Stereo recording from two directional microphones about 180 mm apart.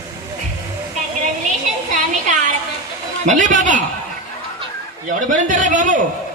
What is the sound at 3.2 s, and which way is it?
Speech, 45° right (ahead or behind).